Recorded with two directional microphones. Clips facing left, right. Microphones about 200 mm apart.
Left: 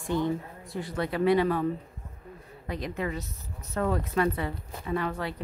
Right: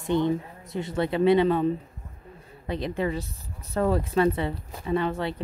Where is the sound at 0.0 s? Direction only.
20° right (ahead or behind).